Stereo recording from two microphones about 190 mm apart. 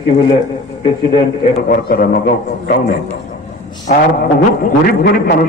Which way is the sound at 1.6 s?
50° left (ahead or behind).